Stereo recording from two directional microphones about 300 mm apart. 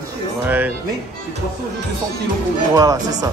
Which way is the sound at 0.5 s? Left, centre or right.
Centre.